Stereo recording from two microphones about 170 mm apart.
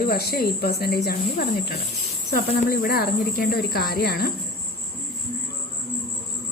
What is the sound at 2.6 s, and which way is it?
A woman's voice, 60° left (ahead or behind).